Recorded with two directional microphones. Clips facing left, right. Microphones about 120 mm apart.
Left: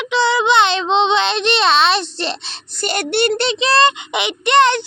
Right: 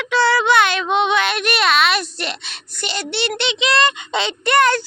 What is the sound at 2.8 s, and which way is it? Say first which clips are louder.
Speech: left 6 dB; 50° left (ahead or behind).